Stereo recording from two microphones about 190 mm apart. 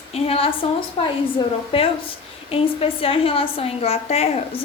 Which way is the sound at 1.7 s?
30° left (ahead or behind).